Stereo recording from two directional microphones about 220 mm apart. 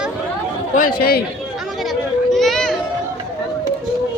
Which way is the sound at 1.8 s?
Centre (ahead or behind).